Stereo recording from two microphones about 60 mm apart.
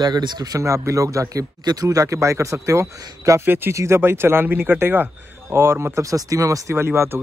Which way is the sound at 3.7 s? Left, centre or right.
Right.